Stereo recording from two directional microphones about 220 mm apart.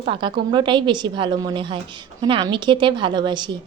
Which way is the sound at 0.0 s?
25° right (ahead or behind).